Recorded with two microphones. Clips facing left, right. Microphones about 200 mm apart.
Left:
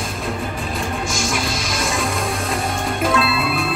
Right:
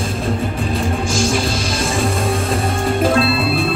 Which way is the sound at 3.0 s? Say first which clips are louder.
Right 3 dB; 30° right (ahead or behind).